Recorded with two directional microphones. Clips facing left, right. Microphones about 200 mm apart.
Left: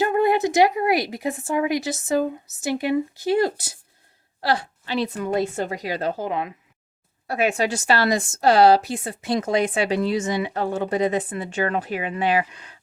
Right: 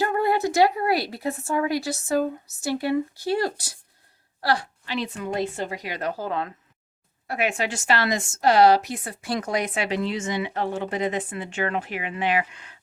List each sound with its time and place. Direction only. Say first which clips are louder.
0.0 s a woman's voice: left 3 dB; 20° left (ahead or behind)
4.4 s a sound: left 1 dB; 25° left (ahead or behind)
4.9 s a woman's voice: left 4 dB; 45° left (ahead or behind); by 6.5 s 15° left (ahead or behind)
7.3 s a woman's voice: left 4 dB; 35° left (ahead or behind)